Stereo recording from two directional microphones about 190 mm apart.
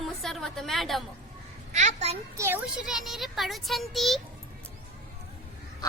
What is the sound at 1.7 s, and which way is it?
Speech, 35° right (ahead or behind).